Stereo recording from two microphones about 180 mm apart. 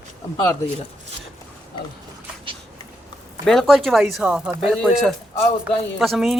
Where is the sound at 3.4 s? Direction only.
Centre (ahead or behind).